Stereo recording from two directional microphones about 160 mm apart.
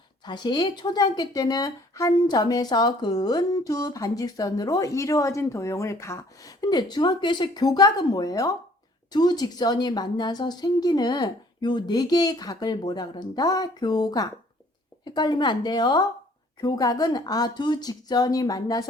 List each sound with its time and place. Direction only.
0.3 s a woman's voice: 30° left (ahead or behind)